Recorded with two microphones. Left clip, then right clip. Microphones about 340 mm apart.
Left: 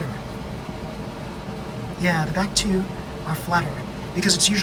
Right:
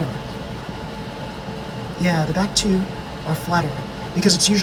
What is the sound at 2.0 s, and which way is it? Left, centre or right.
Speech, centre.